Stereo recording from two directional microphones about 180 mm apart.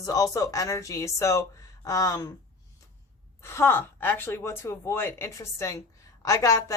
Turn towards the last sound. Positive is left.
turn(degrees=15)  # may be behind; listen again after turning